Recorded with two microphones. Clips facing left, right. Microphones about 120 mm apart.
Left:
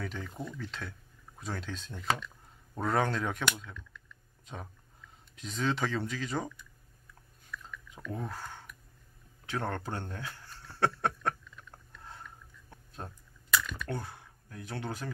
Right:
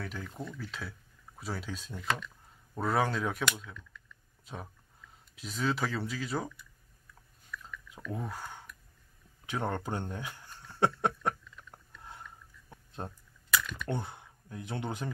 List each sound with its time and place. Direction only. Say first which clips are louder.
0.0 s speech: left 1 dB; centre (ahead or behind)
0.3 s speech: left 1 dB; 10° left (ahead or behind)
0.6 s speech: even; 5° right (ahead or behind)
5.3 s speech: even; 5° right (ahead or behind)
7.5 s a sound: even; centre (ahead or behind)
9.5 s speech: right 1 dB; 15° right (ahead or behind)
12.0 s a sound: even; 10° right (ahead or behind)
13.0 s speech: right 3 dB; 25° right (ahead or behind)
13.5 s typing: left 1 dB; centre (ahead or behind)
13.8 s speech: right 2 dB; 20° right (ahead or behind)